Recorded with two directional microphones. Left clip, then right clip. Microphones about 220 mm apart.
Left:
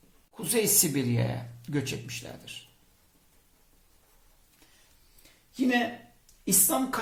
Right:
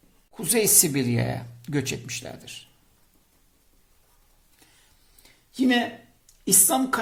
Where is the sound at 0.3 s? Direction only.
45° right (ahead or behind).